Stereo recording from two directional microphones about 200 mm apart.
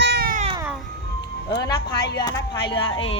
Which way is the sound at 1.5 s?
20° left (ahead or behind).